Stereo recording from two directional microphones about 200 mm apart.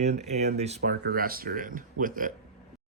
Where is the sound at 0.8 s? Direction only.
50° right (ahead or behind).